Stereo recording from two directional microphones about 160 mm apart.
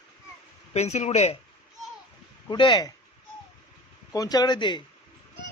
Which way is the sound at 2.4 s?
30° left (ahead or behind).